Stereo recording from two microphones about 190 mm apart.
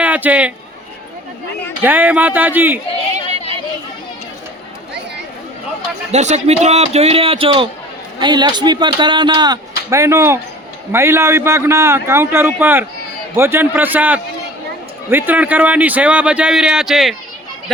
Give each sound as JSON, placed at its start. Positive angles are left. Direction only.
{"t": 0.0, "sound": "a man's voice", "side_deg": -10}
{"t": 1.8, "sound": "a man's voice", "side_deg": -10}
{"t": 6.1, "sound": "a man's voice", "side_deg": -35}